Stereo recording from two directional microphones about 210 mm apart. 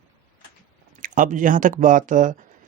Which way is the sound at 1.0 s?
40° right (ahead or behind).